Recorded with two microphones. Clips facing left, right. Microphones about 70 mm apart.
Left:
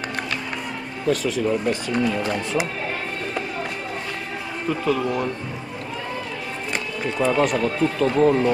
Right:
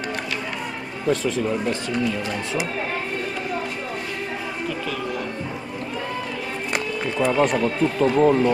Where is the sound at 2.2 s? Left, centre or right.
Left.